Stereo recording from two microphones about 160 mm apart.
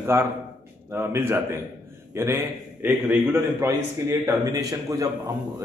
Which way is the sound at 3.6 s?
15° right (ahead or behind).